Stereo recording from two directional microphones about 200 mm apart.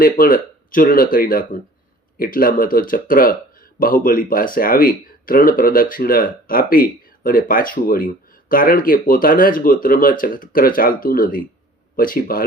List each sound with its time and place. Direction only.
0.0 s speech: 45° left (ahead or behind)